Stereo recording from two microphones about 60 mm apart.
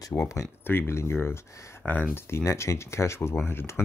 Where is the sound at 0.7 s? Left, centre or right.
Left.